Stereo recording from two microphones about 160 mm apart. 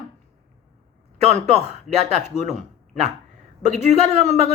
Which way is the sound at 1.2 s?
45° right (ahead or behind).